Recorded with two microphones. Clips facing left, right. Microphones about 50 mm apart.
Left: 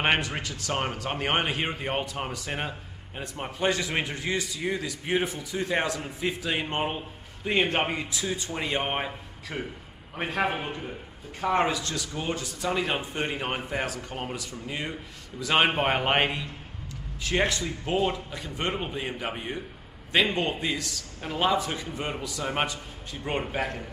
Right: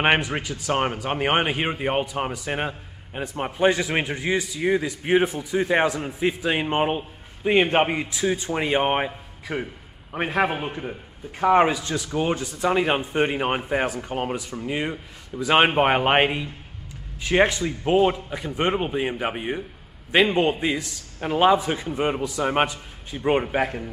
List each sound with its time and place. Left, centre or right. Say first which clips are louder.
0.0 s a man's voice: right 5 dB; right